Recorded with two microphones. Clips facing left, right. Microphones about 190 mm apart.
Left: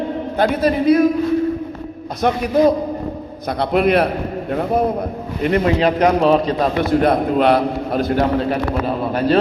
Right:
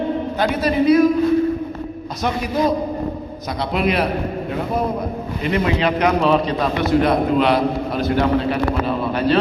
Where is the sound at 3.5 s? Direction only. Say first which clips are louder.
Left 5 dB; 55° left (ahead or behind).